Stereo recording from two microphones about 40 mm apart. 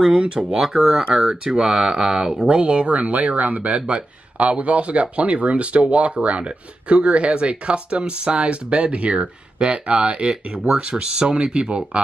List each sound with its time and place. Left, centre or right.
0.2 s speech: right
1.1 s speech: centre